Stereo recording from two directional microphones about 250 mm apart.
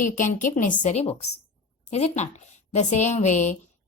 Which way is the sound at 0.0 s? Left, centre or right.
Left.